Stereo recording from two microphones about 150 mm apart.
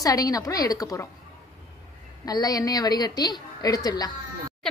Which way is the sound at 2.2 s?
25° left (ahead or behind).